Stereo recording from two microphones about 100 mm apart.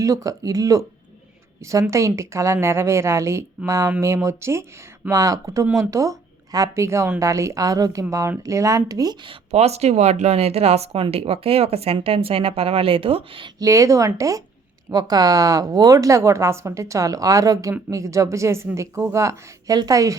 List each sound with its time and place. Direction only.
0.0 s a woman's voice: 35° right (ahead or behind)
9.2 s speech: 75° right (ahead or behind)
13.6 s a woman's voice: 30° right (ahead or behind)